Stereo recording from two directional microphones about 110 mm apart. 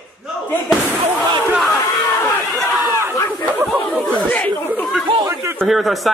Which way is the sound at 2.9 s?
20° right (ahead or behind).